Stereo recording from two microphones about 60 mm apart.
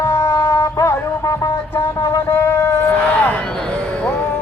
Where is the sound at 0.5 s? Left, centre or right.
Left.